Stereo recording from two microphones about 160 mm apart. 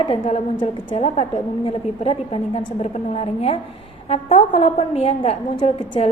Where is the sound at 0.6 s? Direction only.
30° left (ahead or behind).